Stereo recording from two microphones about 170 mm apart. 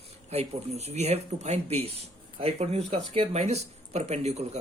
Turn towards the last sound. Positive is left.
turn(degrees=-40)  # may be behind; listen again after turning